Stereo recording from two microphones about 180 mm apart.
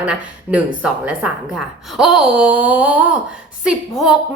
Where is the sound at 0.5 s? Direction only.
5° right (ahead or behind).